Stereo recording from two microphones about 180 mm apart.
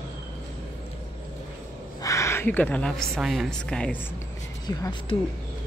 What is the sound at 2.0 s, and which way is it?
A woman's voice, 15° left (ahead or behind).